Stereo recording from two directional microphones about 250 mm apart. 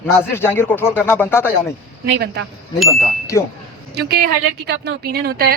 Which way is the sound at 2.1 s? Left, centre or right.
Right.